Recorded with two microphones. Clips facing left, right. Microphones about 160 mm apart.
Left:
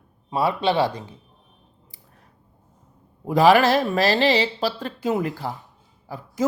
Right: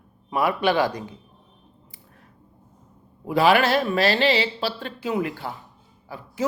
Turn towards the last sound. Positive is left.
turn(degrees=40)  # may be behind; listen again after turning